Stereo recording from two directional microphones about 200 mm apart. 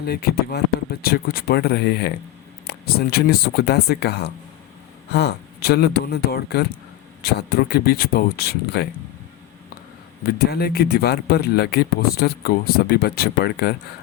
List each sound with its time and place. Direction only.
0.0 s speech: 50° left (ahead or behind)
10.2 s speech: 50° left (ahead or behind)